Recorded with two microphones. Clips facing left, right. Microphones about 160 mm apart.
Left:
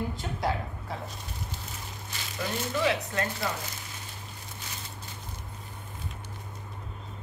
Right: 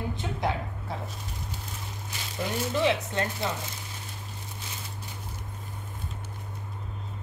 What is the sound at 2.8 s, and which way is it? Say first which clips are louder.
Speech: right 2 dB; 25° right (ahead or behind).